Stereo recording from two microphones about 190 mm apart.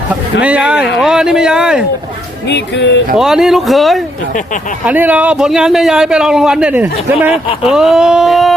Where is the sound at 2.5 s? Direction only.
65° left (ahead or behind).